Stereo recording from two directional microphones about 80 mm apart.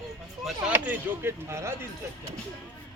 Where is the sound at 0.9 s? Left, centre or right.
Right.